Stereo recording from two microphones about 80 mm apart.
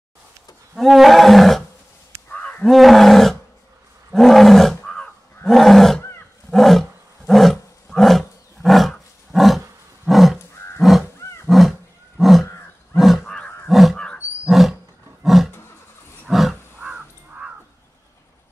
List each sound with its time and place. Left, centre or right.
0.7 s roar: centre
2.2 s wild animals: centre
2.6 s roar: centre
4.8 s crow: centre
5.5 s roar: centre
11.4 s wild animals: centre
12.2 s roaring cats: centre
12.9 s a sound: centre
13.7 s wild animals: centre
14.4 s roaring cats: centre
15.2 s roar: centre
16.3 s wild animals: centre
16.8 s crow: centre